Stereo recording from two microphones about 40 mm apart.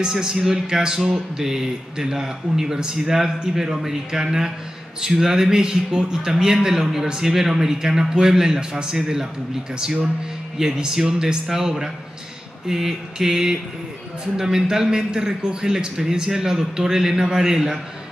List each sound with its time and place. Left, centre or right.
0.0 s speech: centre
10.6 s speech: centre